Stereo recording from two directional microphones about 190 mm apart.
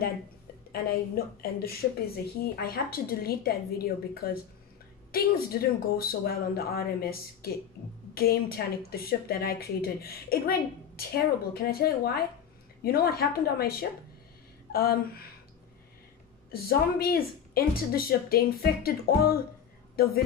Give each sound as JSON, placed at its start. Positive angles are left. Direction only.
{"t": 0.7, "sound": "a woman's voice", "side_deg": 50}
{"t": 16.5, "sound": "a woman's voice", "side_deg": 50}